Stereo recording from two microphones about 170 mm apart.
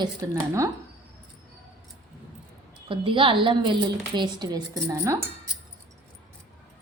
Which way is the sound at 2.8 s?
30° right (ahead or behind).